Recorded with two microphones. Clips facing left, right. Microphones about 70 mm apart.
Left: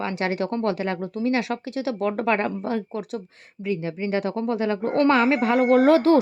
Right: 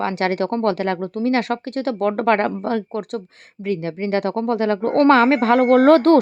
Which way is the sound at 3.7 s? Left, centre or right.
Right.